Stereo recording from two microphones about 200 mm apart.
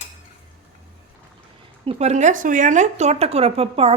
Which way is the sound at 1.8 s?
30° right (ahead or behind).